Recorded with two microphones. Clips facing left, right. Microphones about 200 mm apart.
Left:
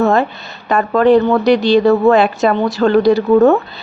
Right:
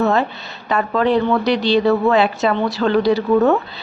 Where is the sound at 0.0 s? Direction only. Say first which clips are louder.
Left 4 dB; 50° left (ahead or behind).